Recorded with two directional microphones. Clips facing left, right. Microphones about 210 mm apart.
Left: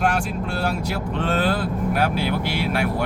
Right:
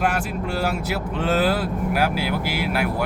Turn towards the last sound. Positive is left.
turn(degrees=-5)  # may be behind; listen again after turning